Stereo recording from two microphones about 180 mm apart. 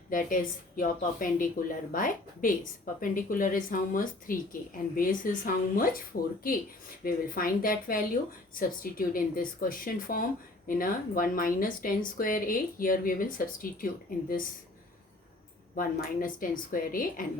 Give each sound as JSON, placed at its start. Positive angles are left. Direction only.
{"t": 0.1, "sound": "speech", "side_deg": 50}
{"t": 7.0, "sound": "speech", "side_deg": 50}
{"t": 15.7, "sound": "speech", "side_deg": 50}